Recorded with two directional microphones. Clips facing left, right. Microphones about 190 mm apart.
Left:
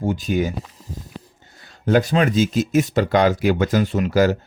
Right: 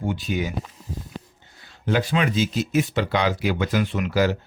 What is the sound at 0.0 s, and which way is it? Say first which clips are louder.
Speech: left 5 dB; 40° left (ahead or behind).